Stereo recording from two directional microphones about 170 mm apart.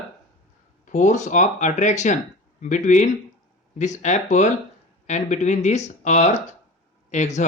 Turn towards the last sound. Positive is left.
turn(degrees=45)  # may be behind; listen again after turning